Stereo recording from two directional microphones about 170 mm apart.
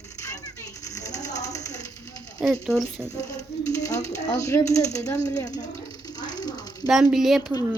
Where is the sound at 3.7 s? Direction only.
20° left (ahead or behind).